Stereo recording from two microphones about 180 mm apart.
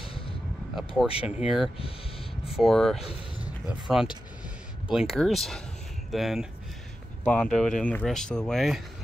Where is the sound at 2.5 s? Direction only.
Centre (ahead or behind).